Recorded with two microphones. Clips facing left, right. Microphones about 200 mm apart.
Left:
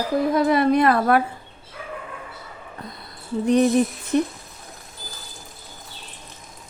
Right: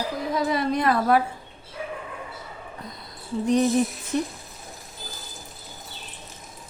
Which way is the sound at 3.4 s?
60° left (ahead or behind).